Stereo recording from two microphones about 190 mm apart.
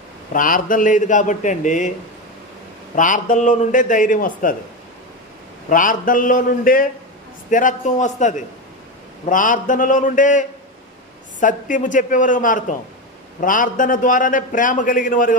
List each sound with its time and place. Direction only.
0.3 s a man's voice: 45° left (ahead or behind)
3.0 s a man's voice: 45° left (ahead or behind)
5.7 s a man's voice: 45° left (ahead or behind)